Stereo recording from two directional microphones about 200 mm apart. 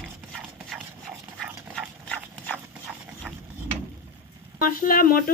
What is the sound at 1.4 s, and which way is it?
Dog, centre (ahead or behind).